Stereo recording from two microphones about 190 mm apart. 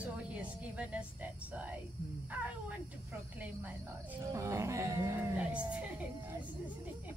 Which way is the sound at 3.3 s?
10° right (ahead or behind).